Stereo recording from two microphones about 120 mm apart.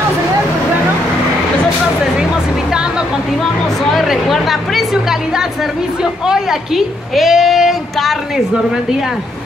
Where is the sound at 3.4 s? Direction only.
Centre (ahead or behind).